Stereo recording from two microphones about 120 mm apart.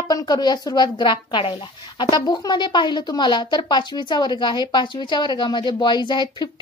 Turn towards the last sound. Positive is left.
turn(degrees=40)  # may be behind; listen again after turning